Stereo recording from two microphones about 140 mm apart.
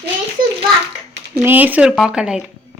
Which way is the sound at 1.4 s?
10° right (ahead or behind).